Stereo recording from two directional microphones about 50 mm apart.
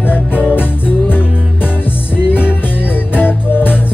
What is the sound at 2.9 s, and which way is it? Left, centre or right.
Music, left.